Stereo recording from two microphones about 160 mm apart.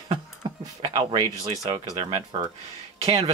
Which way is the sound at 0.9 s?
30° right (ahead or behind).